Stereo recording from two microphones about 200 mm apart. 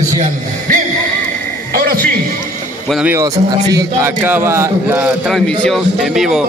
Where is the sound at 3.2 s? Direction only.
20° right (ahead or behind); by 6.4 s centre (ahead or behind).